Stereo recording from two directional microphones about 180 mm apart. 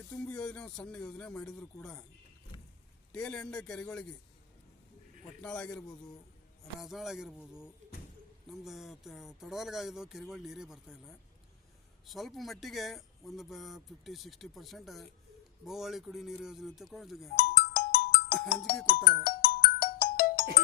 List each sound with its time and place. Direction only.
0.1 s speech: 5° left (ahead or behind)
3.1 s speech: 5° left (ahead or behind)
5.4 s speech: 5° left (ahead or behind)
6.7 s speech: centre (ahead or behind)
17.3 s music: 55° left (ahead or behind)
18.4 s speech: 60° left (ahead or behind)
19.2 s music: 55° left (ahead or behind)